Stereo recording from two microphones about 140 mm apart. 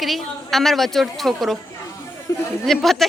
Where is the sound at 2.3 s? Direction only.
20° left (ahead or behind).